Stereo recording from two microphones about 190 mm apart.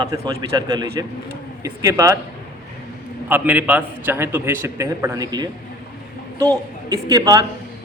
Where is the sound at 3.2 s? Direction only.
10° right (ahead or behind).